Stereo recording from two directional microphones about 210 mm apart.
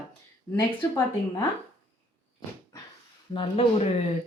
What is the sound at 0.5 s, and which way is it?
Speech, 10° left (ahead or behind).